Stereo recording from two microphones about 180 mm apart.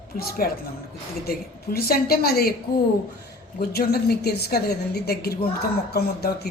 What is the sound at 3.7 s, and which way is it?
A woman's voice, 60° left (ahead or behind).